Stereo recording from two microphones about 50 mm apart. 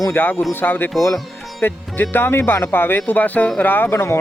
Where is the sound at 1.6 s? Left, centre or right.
Left.